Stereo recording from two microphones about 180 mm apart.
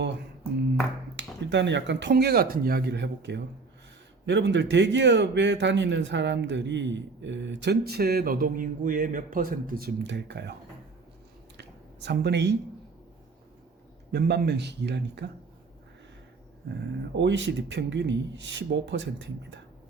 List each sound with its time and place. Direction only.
1.1 s speech: 80° right
11.5 s a sound: 70° right (ahead or behind)
14.1 s speech: 65° right (ahead or behind)
17.2 s speech: 85° right